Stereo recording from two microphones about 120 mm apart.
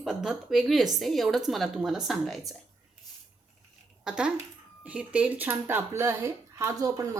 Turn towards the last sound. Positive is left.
turn(degrees=-30)  # may be behind; listen again after turning